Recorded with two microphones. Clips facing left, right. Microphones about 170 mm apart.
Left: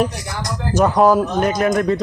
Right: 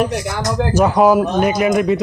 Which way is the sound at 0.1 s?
80° right.